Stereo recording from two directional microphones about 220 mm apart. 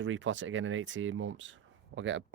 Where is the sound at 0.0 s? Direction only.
60° right (ahead or behind).